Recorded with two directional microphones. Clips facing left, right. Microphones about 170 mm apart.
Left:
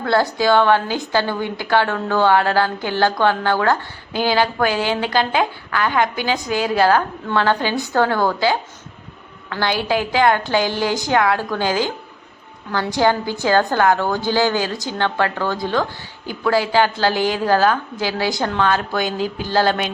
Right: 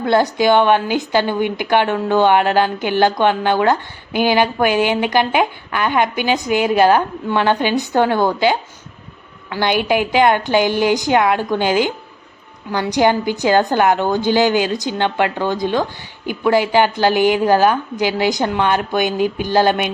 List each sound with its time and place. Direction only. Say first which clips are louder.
0.0 s a woman's voice: right 3 dB; 20° right (ahead or behind)